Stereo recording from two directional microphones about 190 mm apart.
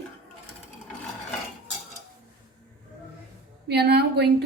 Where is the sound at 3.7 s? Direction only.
60° right (ahead or behind).